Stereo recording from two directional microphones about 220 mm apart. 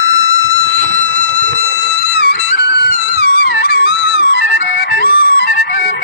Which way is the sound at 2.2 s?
45° left (ahead or behind).